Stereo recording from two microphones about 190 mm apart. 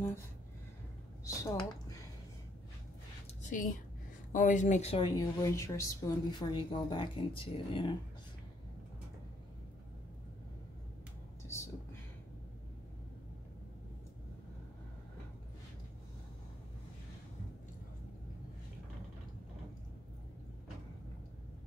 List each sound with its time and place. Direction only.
1.2 s a woman's voice: 15° left (ahead or behind)
4.3 s speech: 45° left (ahead or behind); by 7.9 s 25° left (ahead or behind)
11.4 s whispering: 15° left (ahead or behind)